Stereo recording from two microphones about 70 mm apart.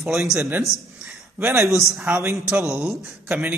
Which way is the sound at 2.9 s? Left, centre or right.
Centre.